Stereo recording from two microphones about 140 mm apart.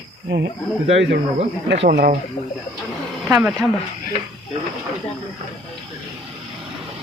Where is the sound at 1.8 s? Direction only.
90° right.